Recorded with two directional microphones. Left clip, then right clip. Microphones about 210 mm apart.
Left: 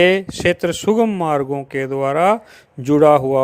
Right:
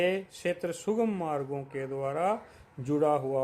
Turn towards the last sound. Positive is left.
turn(degrees=40)  # may be behind; listen again after turning